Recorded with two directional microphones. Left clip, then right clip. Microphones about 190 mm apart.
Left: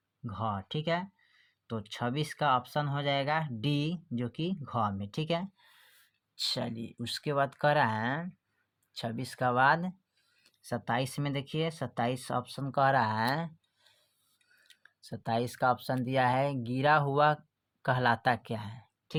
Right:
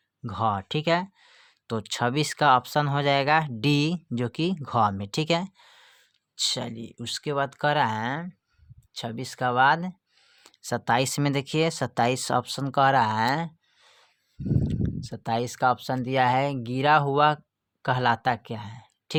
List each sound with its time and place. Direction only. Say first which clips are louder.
0.2 s speech: right 9 dB; 50° right (ahead or behind); by 9.9 s 20° right (ahead or behind)
10.4 s speech: right 8 dB; 40° right (ahead or behind); by 18.9 s 20° right (ahead or behind)